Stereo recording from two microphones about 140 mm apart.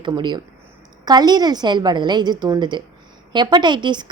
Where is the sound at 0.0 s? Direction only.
35° right (ahead or behind).